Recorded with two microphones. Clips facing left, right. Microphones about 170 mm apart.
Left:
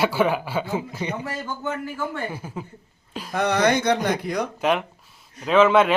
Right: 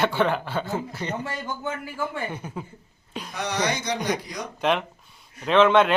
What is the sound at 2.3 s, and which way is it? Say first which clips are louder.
Mantra: left 1 dB; 5° left (ahead or behind).